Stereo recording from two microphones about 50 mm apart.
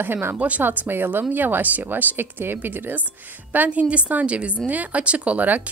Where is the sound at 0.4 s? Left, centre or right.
Right.